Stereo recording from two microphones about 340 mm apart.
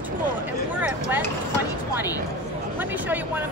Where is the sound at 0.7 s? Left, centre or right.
Centre.